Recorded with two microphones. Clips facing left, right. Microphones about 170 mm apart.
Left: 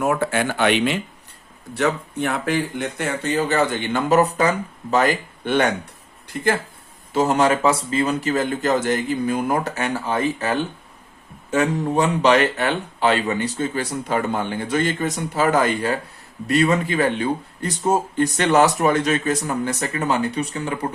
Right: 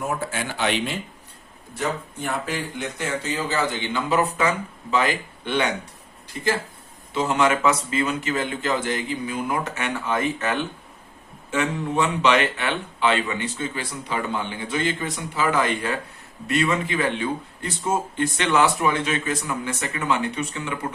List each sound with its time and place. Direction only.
0.0 s speech: 70° left (ahead or behind); by 5.7 s 45° left (ahead or behind)
7.1 s speech: 40° left (ahead or behind)